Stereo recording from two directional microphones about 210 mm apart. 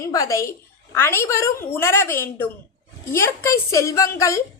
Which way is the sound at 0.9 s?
10° left (ahead or behind).